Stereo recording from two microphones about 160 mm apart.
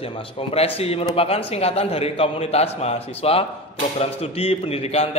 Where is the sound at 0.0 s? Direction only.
35° left (ahead or behind).